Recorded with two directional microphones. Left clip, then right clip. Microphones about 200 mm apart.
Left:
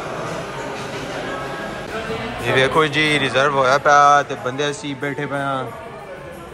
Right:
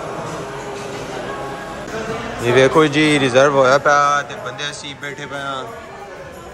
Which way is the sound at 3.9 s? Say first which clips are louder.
Left 2 dB; centre (ahead or behind).